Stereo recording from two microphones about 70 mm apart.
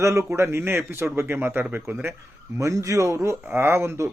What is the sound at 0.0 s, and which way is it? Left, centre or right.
Speech, right.